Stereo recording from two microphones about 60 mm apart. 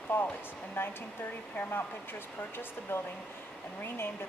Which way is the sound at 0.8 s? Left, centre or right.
Left.